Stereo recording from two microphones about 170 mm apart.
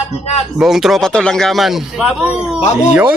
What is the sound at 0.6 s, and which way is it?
A man's voice, centre (ahead or behind).